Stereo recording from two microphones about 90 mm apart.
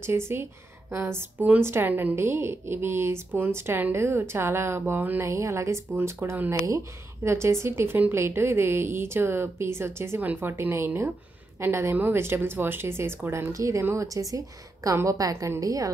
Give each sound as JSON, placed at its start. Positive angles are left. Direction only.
{"t": 0.0, "sound": "a woman's voice", "side_deg": -30}
{"t": 5.2, "sound": "speech", "side_deg": -35}
{"t": 7.2, "sound": "a woman's voice", "side_deg": -30}